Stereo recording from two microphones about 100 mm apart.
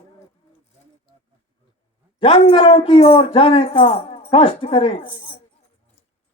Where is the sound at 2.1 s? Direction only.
55° left (ahead or behind).